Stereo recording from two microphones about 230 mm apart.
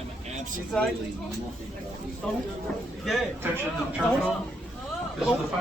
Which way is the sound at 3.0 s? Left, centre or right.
Centre.